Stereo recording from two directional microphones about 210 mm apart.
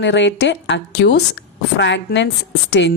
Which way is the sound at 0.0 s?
60° left (ahead or behind).